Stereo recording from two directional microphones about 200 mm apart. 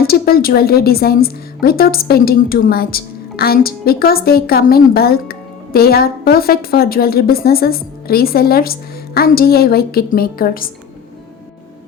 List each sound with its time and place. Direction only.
0.0 s a woman's voice: 50° left (ahead or behind)